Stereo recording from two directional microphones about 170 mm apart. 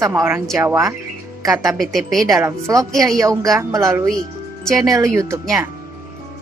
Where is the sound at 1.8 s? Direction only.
Centre (ahead or behind).